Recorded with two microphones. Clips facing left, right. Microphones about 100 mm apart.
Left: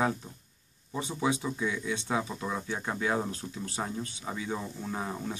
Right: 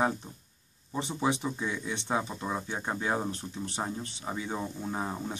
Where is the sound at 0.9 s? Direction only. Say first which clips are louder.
Even; 25° right (ahead or behind).